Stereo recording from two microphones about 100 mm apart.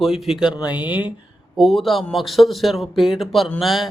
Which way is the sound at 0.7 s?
15° right (ahead or behind).